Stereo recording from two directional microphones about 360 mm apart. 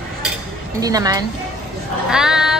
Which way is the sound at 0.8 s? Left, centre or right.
Centre.